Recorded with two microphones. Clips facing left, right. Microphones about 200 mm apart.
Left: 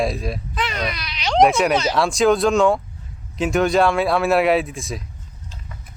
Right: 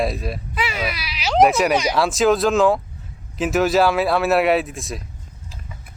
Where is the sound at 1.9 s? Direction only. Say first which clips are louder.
Even; centre (ahead or behind).